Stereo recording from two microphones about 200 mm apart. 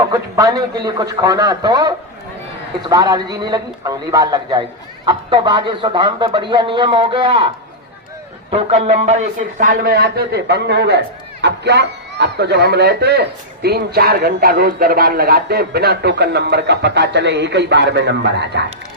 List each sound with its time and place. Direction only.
0.1 s a man's voice: 15° right (ahead or behind)
8.4 s a man's voice: 30° right (ahead or behind); by 18.6 s 60° right (ahead or behind)